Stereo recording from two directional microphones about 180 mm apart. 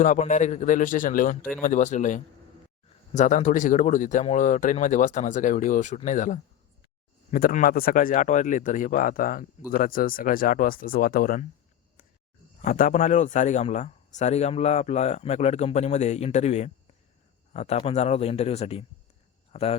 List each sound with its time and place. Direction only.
0.0 s speech: 45° left (ahead or behind)
12.6 s speech: 45° left (ahead or behind)